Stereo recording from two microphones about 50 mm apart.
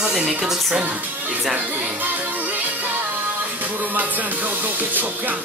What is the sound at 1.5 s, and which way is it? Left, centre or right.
Music, right.